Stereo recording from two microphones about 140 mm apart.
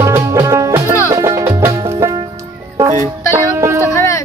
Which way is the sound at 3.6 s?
20° right (ahead or behind).